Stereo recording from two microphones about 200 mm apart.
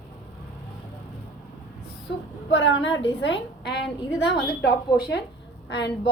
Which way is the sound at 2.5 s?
65° left (ahead or behind).